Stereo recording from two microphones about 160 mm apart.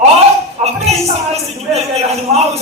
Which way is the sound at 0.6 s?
40° right (ahead or behind).